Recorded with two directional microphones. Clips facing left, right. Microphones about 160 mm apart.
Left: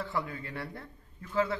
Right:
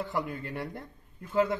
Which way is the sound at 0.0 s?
15° right (ahead or behind).